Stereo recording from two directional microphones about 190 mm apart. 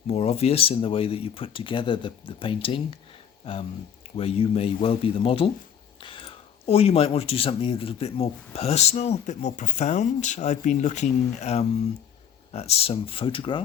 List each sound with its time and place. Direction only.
0.1 s speech: 30° left (ahead or behind)